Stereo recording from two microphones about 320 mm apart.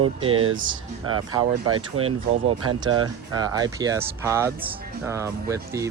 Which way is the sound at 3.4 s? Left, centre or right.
Centre.